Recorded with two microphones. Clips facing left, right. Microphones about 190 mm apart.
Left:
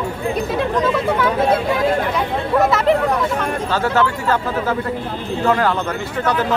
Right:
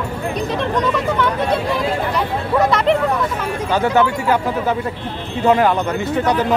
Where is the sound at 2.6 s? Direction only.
Centre (ahead or behind).